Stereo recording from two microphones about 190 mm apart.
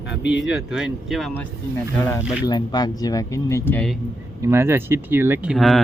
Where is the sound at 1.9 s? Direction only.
15° left (ahead or behind).